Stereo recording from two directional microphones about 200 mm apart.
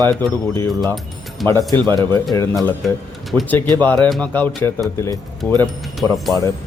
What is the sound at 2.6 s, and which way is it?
Speech, centre (ahead or behind).